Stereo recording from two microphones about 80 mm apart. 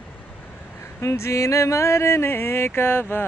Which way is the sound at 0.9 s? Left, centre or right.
Left.